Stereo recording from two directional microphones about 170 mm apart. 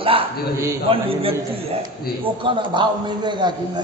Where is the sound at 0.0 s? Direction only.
30° right (ahead or behind).